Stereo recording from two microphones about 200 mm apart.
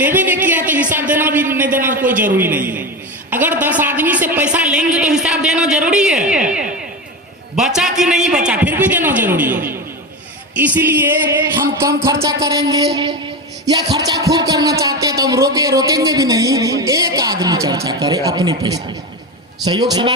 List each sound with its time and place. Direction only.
0.0 s music: 10° right (ahead or behind)
0.9 s a sound: 10° right (ahead or behind)
2.0 s a man's voice: 10° right (ahead or behind)
10.8 s a man's voice: 10° right (ahead or behind)